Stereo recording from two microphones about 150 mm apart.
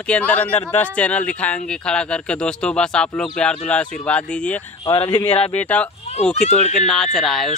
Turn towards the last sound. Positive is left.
turn(degrees=0)  # may be behind; listen again after turning